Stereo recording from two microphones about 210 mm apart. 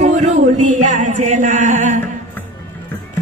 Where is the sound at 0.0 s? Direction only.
35° right (ahead or behind).